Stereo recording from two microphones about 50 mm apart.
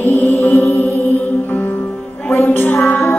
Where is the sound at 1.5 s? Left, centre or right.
Left.